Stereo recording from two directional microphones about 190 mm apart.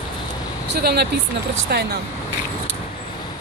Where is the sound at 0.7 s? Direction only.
60° right (ahead or behind).